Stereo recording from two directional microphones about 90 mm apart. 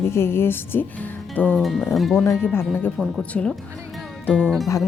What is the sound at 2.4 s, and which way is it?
Speech, 25° left (ahead or behind).